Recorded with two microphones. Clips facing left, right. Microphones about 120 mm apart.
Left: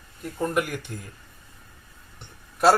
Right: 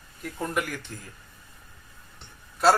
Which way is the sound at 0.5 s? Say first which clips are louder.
Left 3 dB; 50° left (ahead or behind).